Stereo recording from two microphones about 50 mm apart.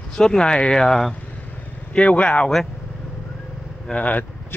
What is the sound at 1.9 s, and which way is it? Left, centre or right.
Speech, left.